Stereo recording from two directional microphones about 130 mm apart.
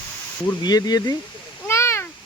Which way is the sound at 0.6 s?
30° left (ahead or behind).